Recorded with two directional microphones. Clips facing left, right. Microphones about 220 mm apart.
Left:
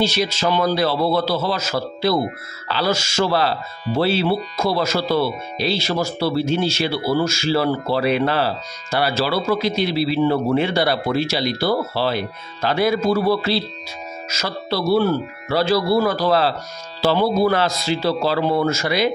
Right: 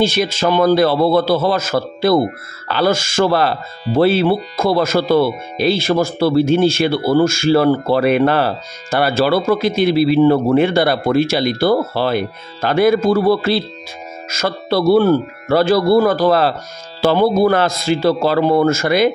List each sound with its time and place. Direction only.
0.0 s speech: 50° right (ahead or behind)